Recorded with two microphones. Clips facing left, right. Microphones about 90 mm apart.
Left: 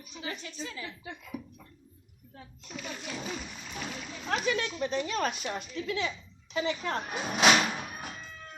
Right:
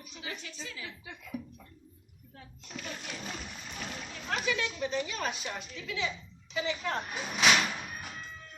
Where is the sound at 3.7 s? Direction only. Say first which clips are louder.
Left 3 dB; centre (ahead or behind).